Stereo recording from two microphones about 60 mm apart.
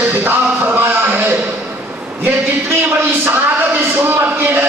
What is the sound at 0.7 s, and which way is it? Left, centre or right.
Speech, right.